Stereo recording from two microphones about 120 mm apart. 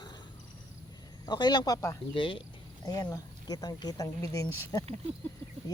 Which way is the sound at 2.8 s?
30° left (ahead or behind).